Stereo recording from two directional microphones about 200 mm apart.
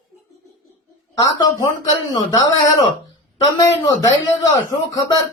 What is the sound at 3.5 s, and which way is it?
Speech, 15° left (ahead or behind).